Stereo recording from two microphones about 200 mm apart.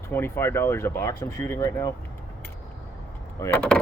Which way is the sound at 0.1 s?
10° left (ahead or behind).